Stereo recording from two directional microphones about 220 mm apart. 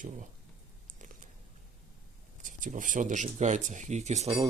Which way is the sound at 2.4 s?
35° right (ahead or behind).